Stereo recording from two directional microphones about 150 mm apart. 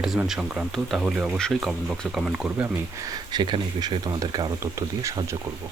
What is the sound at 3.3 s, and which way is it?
Speech, 30° right (ahead or behind).